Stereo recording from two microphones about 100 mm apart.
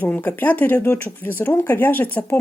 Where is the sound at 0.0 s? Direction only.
15° left (ahead or behind).